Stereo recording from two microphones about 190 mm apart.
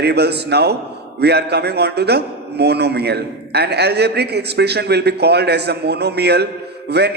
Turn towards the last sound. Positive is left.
turn(degrees=-60)  # may be behind; listen again after turning